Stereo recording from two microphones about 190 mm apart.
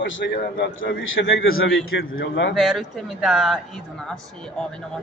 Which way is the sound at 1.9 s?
65° left (ahead or behind).